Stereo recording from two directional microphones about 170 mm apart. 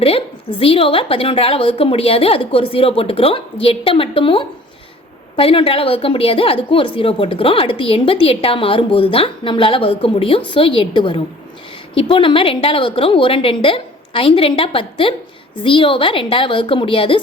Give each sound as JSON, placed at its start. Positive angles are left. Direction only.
{"t": 0.6, "sound": "a woman's voice", "side_deg": 35}